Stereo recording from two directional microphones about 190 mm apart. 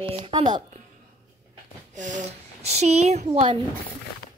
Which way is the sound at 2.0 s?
40° right (ahead or behind).